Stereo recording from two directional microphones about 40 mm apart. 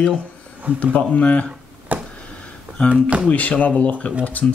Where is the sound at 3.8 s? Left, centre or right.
Left.